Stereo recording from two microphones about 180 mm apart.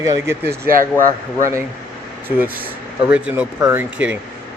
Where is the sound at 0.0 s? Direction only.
15° right (ahead or behind).